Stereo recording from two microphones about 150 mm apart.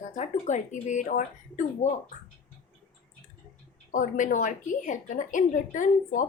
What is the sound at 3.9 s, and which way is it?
A woman's voice, 60° left (ahead or behind).